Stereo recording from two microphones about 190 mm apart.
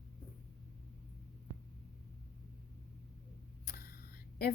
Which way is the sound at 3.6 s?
55° left (ahead or behind).